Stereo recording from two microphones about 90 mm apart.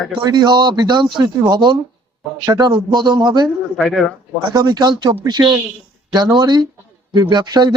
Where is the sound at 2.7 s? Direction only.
60° right (ahead or behind).